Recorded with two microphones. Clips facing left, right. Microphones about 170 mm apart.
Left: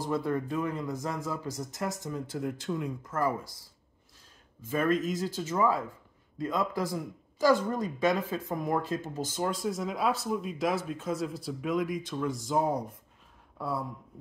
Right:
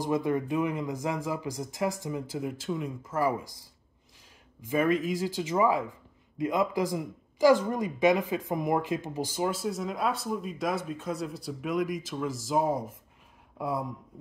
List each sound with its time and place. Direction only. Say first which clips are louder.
0.0 s speech: right 3 dB; 15° right (ahead or behind)
4.6 s speech: right 2 dB; 15° right (ahead or behind)
13.6 s speech: right 2 dB; 15° right (ahead or behind)